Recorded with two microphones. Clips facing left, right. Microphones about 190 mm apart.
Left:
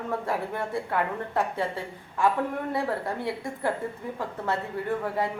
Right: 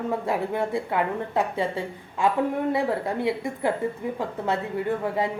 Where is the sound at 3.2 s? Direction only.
20° right (ahead or behind).